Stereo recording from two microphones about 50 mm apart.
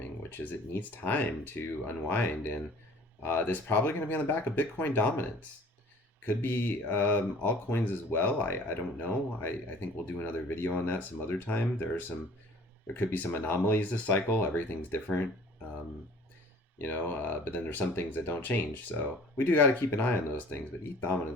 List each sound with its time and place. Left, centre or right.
0.2 s speech: left
6.2 s speech: left
16.9 s speech: left